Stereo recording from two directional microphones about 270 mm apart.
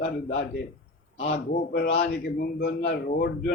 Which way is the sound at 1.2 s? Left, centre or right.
Left.